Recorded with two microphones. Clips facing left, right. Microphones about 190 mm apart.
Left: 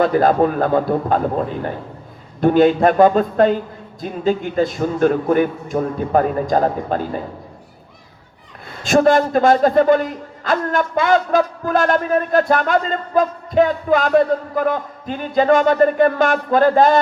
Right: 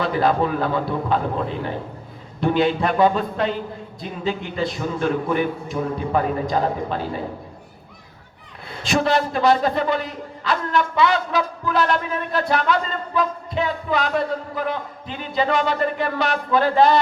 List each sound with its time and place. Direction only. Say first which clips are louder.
0.0 s a man's voice: left 6 dB; 50° left (ahead or behind)
2.4 s a man's voice: left 7 dB; 45° left (ahead or behind)
8.8 s a man's voice: left 6 dB; 45° left (ahead or behind)